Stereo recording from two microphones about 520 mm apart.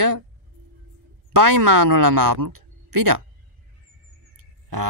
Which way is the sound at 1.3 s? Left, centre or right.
Right.